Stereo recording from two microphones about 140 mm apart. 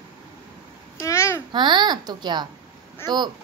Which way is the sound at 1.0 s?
20° left (ahead or behind).